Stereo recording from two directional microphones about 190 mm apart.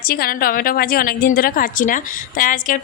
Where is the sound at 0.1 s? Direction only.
50° left (ahead or behind).